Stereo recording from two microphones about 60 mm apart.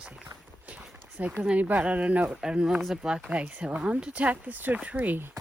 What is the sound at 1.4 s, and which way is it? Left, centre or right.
Speech, right.